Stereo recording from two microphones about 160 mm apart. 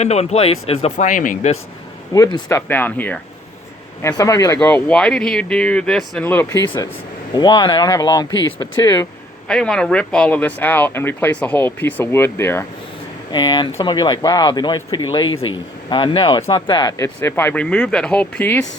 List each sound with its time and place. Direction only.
0.0 s speech: 45° left (ahead or behind)
2.1 s speech: 20° left (ahead or behind)
4.0 s speech: 20° left (ahead or behind)
4.6 s speech: 10° left (ahead or behind)
9.5 s speech: 5° left (ahead or behind)
13.3 s speech: 30° left (ahead or behind)
17.2 s speech: 15° left (ahead or behind)